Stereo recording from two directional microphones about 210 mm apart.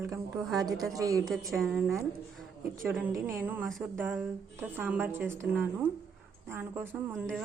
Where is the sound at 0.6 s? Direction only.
15° right (ahead or behind).